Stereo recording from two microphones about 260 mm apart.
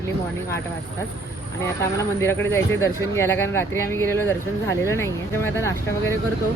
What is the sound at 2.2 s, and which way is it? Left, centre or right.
Speech, centre.